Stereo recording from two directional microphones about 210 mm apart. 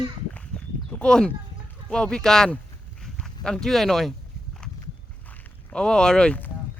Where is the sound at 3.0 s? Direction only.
5° left (ahead or behind).